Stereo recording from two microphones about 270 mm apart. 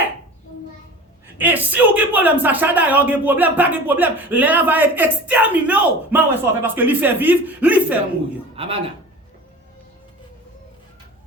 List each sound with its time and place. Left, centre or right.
1.4 s speech: centre
8.5 s speech: centre